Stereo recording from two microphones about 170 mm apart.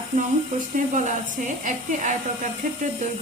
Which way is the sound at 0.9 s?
45° right (ahead or behind).